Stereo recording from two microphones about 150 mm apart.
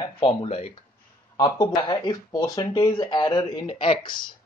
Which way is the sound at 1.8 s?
30° left (ahead or behind).